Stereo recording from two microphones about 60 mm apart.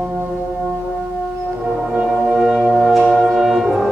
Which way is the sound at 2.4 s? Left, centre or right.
Centre.